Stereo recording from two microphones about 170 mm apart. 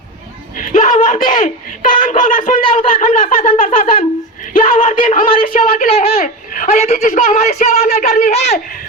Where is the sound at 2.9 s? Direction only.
50° left (ahead or behind).